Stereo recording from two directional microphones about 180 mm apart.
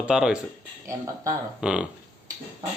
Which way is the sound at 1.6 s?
5° right (ahead or behind).